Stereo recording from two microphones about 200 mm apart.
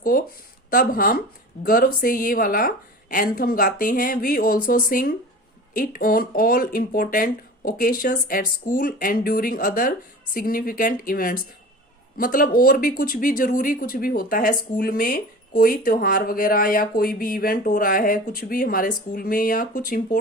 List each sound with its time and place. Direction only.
0.0 s speech: 45° left (ahead or behind)